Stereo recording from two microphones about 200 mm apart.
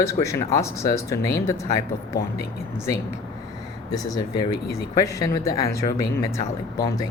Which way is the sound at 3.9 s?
20° left (ahead or behind).